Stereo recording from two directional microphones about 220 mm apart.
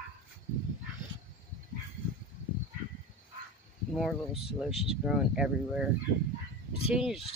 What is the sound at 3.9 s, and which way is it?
Speech, centre (ahead or behind).